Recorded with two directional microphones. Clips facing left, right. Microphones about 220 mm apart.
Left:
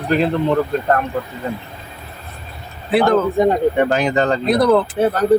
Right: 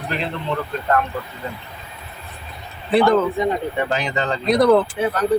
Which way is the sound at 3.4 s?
50° left (ahead or behind).